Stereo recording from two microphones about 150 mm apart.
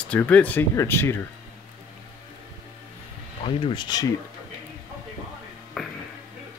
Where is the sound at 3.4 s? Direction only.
35° left (ahead or behind).